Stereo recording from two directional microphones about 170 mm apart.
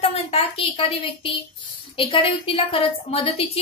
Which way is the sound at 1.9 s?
30° left (ahead or behind).